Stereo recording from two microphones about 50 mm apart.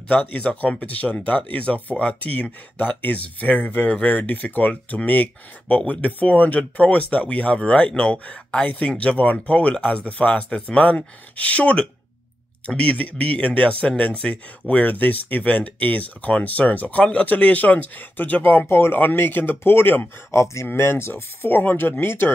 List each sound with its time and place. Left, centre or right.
0.1 s speech: left
3.0 s speech: left
21.4 s speech: left